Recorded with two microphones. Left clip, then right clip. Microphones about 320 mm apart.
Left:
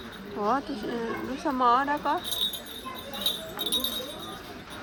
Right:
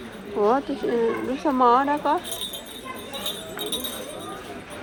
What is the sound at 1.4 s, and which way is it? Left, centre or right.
Speech, right.